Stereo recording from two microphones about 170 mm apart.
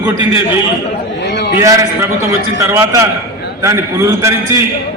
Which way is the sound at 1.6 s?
20° right (ahead or behind).